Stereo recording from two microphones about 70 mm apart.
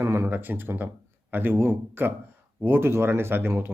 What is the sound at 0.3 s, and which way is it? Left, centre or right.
Speech, right.